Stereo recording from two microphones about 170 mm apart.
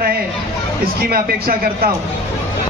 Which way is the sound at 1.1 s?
60° right (ahead or behind).